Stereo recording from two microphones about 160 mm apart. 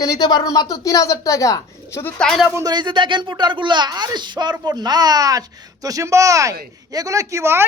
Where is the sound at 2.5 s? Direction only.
20° right (ahead or behind).